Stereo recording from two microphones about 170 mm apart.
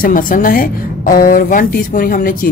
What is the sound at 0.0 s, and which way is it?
Speech, 55° left (ahead or behind).